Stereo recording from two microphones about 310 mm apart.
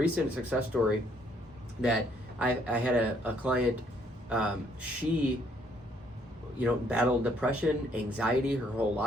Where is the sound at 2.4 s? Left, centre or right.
Centre.